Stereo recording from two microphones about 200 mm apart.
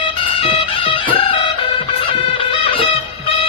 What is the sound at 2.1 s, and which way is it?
Music, 25° left (ahead or behind).